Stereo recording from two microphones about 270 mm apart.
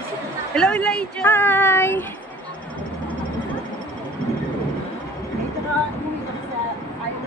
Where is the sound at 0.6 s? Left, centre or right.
Centre.